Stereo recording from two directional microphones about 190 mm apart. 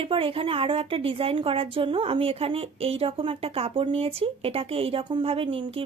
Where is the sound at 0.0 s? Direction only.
30° right (ahead or behind).